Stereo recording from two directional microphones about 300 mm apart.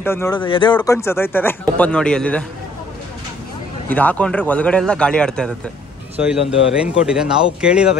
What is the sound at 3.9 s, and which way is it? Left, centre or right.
Speech, centre.